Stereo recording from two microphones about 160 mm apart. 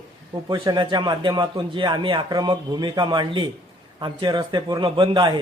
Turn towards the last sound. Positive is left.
turn(degrees=-30)  # may be behind; listen again after turning